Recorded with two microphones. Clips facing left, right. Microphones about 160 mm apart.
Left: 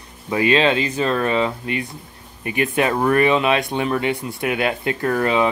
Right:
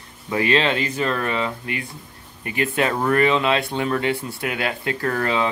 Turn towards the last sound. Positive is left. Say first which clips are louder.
# left 4 dB
turn(degrees=15)  # may be behind; listen again after turning